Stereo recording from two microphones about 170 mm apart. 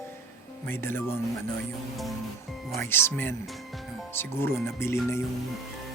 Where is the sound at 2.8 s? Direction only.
15° left (ahead or behind).